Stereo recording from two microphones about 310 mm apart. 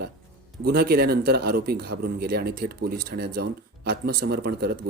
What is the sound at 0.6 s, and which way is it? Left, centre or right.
A man's voice, right.